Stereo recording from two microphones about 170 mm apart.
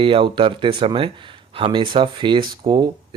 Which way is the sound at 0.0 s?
30° right (ahead or behind).